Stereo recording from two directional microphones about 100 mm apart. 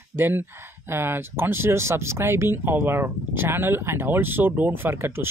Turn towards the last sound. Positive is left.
turn(degrees=-25)  # may be behind; listen again after turning